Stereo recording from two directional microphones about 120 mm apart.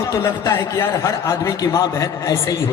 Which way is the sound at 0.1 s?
25° left (ahead or behind).